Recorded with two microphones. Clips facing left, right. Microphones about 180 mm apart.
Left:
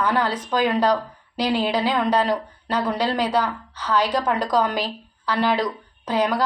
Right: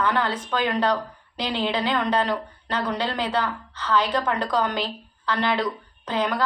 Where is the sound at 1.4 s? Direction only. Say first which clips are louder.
Left 4 dB; 35° left (ahead or behind).